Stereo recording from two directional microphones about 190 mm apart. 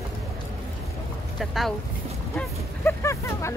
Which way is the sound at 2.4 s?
15° left (ahead or behind).